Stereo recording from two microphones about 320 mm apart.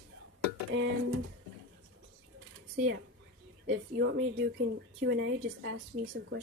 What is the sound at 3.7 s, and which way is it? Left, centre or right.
Speech, right.